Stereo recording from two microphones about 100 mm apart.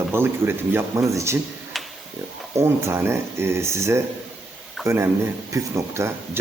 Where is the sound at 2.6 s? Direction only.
25° right (ahead or behind).